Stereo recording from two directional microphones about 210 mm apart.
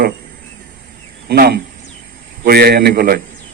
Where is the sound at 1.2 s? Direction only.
50° right (ahead or behind).